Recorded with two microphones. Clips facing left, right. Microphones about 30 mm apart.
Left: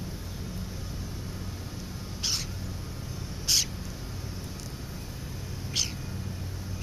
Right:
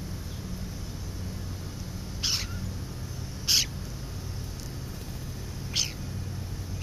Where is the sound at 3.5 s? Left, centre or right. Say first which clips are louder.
Right 1 dB; centre.